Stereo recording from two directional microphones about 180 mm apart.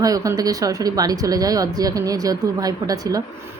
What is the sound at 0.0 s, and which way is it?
A woman's voice, 20° right (ahead or behind).